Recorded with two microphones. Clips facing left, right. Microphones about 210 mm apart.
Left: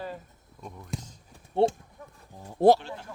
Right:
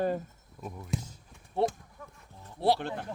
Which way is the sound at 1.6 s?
30° left (ahead or behind).